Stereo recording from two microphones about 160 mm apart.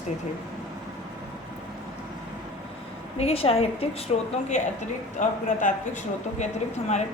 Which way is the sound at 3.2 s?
40° left (ahead or behind).